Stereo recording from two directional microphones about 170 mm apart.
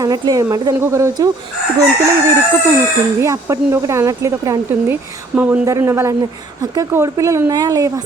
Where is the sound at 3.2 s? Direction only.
15° right (ahead or behind).